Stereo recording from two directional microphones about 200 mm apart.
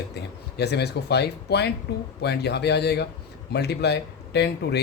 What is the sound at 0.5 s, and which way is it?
Speech, 55° left (ahead or behind).